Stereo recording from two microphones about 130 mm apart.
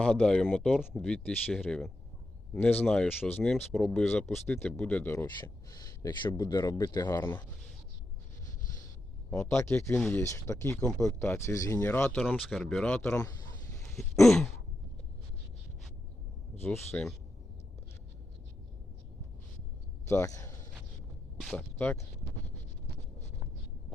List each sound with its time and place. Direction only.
0.0 s speech: 5° left (ahead or behind)
3.8 s speech: centre (ahead or behind)
4.0 s speech: 15° left (ahead or behind)
5.4 s speech: 25° left (ahead or behind)
9.3 s speech: 5° left (ahead or behind)
9.6 s speech: 20° left (ahead or behind)
12.4 s speech: 5° left (ahead or behind)
14.3 s speech: centre (ahead or behind)
16.9 s speech: 15° left (ahead or behind)
20.1 s speech: 25° left (ahead or behind)
21.5 s speech: 10° left (ahead or behind)